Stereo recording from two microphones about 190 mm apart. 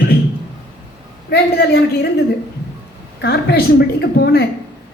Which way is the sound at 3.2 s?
60° left (ahead or behind).